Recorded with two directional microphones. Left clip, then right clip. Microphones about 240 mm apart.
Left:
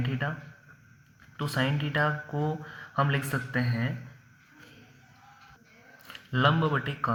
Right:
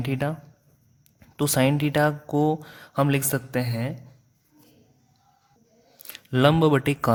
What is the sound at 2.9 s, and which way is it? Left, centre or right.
Speech, right.